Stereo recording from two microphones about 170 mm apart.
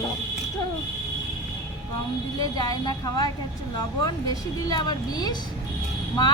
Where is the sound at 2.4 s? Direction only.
25° left (ahead or behind).